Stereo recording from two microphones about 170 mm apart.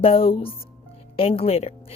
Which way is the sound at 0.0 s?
35° left (ahead or behind).